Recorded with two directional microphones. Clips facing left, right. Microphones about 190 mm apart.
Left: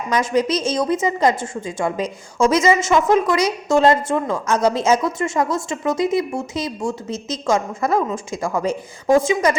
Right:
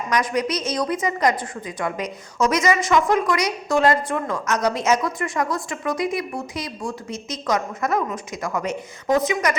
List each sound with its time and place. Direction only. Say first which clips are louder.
0.1 s a woman's voice: left 4 dB; 25° left (ahead or behind)